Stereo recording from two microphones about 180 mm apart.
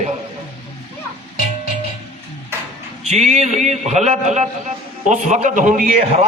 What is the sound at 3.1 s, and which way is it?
A man's voice, 40° right (ahead or behind).